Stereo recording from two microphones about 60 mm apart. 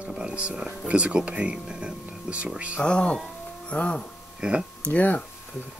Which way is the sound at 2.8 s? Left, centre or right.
Centre.